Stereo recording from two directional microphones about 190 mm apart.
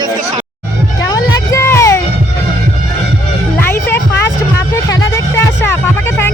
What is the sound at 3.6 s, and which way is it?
Music, 10° left (ahead or behind).